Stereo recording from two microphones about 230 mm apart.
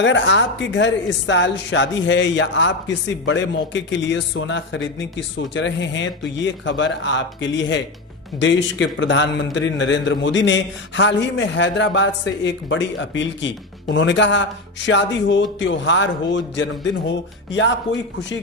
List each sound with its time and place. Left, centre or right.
0.0 s a woman's voice: left